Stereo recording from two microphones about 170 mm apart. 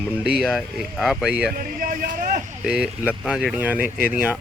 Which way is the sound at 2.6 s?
5° right (ahead or behind).